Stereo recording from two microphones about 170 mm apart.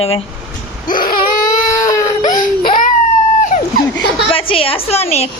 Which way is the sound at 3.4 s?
45° left (ahead or behind).